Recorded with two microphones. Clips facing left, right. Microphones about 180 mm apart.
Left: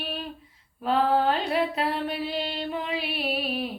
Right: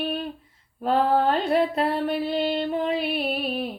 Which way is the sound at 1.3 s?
50° right (ahead or behind).